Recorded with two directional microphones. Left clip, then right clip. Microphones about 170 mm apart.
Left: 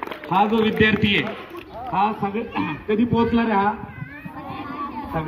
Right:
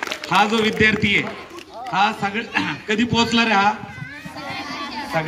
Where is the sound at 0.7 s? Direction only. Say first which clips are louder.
Right 2 dB; 15° left (ahead or behind).